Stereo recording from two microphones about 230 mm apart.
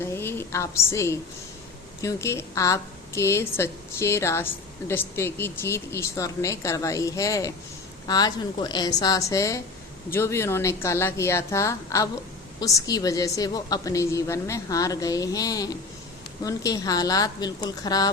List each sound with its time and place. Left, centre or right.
0.0 s a woman's voice: centre